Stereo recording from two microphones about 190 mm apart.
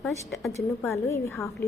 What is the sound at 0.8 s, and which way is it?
Speech, 15° left (ahead or behind).